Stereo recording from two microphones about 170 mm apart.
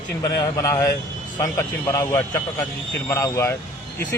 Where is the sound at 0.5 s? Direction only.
20° left (ahead or behind).